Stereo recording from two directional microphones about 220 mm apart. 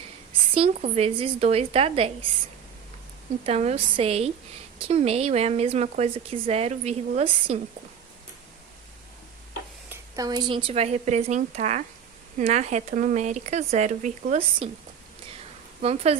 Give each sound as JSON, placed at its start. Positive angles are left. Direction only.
{"t": 0.5, "sound": "a woman's voice", "side_deg": -25}
{"t": 3.4, "sound": "a woman's voice", "side_deg": -30}
{"t": 9.9, "sound": "a woman's voice", "side_deg": -15}
{"t": 15.8, "sound": "a woman's voice", "side_deg": -30}